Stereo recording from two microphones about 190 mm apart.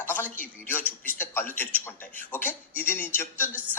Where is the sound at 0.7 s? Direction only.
10° left (ahead or behind).